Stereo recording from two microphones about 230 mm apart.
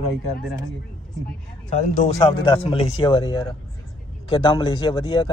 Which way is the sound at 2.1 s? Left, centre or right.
Left.